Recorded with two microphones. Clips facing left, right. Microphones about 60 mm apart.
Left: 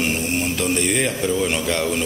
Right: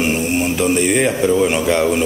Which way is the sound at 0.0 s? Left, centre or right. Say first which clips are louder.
Right 5 dB; centre.